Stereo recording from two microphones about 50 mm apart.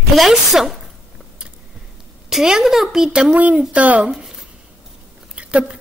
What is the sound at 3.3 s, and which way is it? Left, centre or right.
Speech, right.